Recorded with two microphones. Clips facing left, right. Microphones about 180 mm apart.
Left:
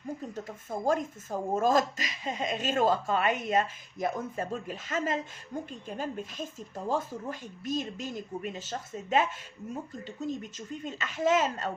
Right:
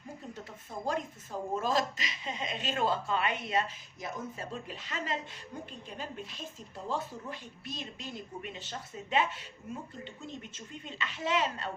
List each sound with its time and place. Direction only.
0.3 s speech: 45° left (ahead or behind)